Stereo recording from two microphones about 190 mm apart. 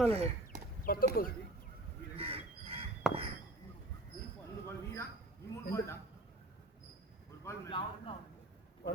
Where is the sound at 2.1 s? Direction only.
30° right (ahead or behind).